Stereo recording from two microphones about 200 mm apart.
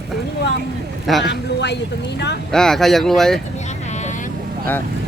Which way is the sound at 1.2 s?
60° left (ahead or behind).